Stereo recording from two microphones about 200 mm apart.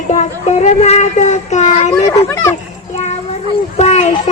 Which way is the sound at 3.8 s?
35° left (ahead or behind).